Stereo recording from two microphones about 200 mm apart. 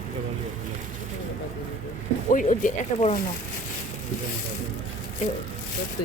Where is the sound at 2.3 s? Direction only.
40° left (ahead or behind).